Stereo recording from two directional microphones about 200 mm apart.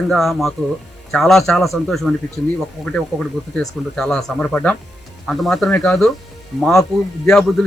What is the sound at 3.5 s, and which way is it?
Speech, 5° left (ahead or behind).